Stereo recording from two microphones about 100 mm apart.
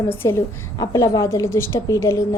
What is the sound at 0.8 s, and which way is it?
A woman's voice, 40° left (ahead or behind).